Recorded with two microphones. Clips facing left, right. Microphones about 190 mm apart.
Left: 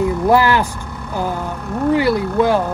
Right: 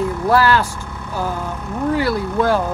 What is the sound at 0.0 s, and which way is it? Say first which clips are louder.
Vehicle: left 2 dB; 15° left (ahead or behind).